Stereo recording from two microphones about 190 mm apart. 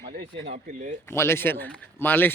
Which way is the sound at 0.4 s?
40° right (ahead or behind).